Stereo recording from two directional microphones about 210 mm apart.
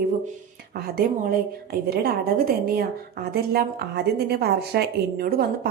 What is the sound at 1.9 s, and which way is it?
A woman's voice, 45° right (ahead or behind).